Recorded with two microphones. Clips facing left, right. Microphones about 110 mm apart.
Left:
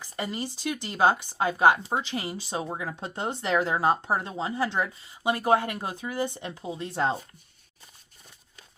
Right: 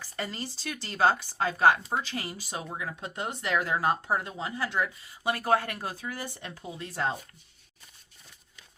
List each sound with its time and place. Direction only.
0.0 s speech: 15° left (ahead or behind)